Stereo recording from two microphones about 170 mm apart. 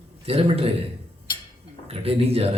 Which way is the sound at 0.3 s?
35° right (ahead or behind).